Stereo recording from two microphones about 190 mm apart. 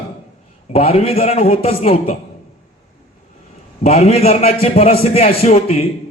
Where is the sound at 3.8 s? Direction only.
35° left (ahead or behind).